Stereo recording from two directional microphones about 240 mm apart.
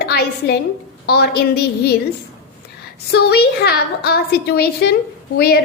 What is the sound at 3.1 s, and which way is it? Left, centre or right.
A woman's voice, left.